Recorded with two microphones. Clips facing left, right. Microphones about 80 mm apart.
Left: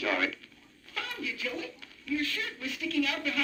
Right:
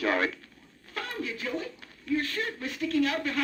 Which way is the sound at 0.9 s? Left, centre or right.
Right.